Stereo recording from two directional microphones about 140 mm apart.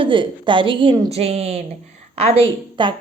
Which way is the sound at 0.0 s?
35° right (ahead or behind).